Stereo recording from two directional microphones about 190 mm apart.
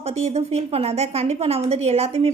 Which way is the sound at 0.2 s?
35° right (ahead or behind).